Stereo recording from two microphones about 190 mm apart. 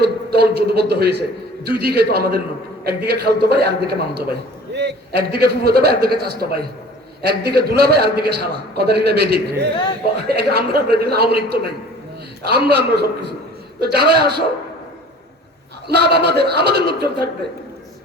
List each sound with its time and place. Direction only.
0.0 s a man's voice: 60° right (ahead or behind)
15.9 s a man's voice: 60° right (ahead or behind)